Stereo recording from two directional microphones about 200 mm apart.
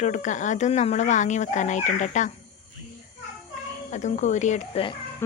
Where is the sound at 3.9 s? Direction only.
35° left (ahead or behind).